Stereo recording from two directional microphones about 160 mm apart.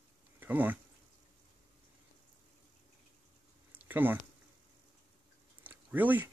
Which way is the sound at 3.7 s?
10° right (ahead or behind).